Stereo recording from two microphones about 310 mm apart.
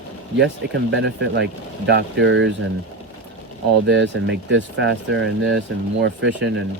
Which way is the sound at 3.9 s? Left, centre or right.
Right.